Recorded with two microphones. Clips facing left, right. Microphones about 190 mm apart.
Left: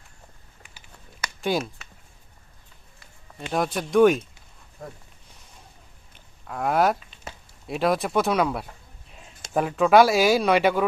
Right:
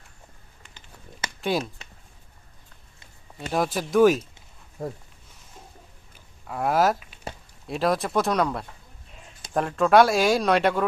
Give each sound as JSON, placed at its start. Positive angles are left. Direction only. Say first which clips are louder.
{"t": 1.4, "sound": "speech", "louder": "left 1 dB", "side_deg": 0}
{"t": 3.5, "sound": "speech", "louder": "left 1 dB", "side_deg": 0}
{"t": 6.1, "sound": "a sound", "louder": "right 1 dB", "side_deg": -5}
{"t": 7.7, "sound": "speech", "louder": "left 1 dB", "side_deg": 0}